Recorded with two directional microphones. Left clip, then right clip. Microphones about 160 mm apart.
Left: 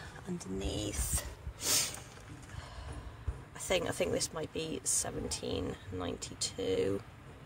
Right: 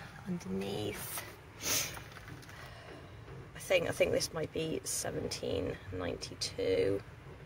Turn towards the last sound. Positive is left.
turn(degrees=40)  # may be behind; listen again after turning